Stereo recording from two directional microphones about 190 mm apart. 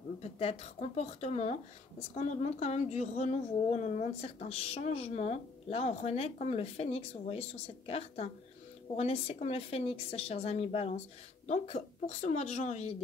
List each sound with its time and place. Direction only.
0.2 s speech: 30° left (ahead or behind)